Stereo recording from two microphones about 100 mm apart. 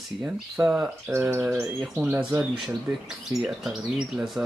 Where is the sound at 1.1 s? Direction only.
15° right (ahead or behind).